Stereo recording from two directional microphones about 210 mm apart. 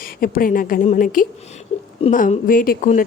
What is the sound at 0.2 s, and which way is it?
A woman's voice, 40° left (ahead or behind).